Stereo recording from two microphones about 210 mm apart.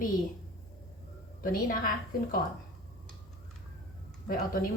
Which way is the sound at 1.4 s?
45° left (ahead or behind).